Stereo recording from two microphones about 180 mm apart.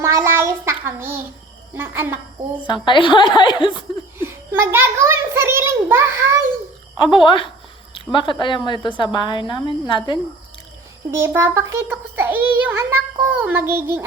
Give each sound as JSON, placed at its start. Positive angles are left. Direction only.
{"t": 0.0, "sound": "child singing", "side_deg": -15}
{"t": 1.7, "sound": "a child's voice", "side_deg": -10}
{"t": 2.8, "sound": "a woman's voice", "side_deg": 25}
{"t": 4.2, "sound": "a sound", "side_deg": -15}
{"t": 7.0, "sound": "a woman's voice", "side_deg": 25}
{"t": 11.1, "sound": "a child's voice", "side_deg": -15}